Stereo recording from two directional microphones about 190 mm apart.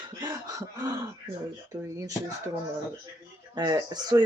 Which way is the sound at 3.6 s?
20° right (ahead or behind).